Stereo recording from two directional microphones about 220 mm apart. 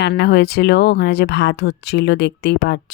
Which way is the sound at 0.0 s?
50° left (ahead or behind).